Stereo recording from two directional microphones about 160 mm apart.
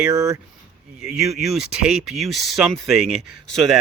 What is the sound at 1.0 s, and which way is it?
Speech, centre (ahead or behind).